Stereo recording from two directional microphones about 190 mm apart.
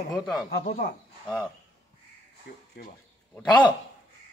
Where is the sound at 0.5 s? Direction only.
50° left (ahead or behind).